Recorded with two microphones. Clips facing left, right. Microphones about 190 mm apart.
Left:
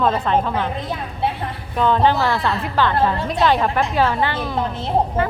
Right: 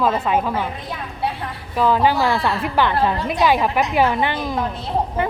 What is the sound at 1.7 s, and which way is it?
A woman's voice, 5° right (ahead or behind).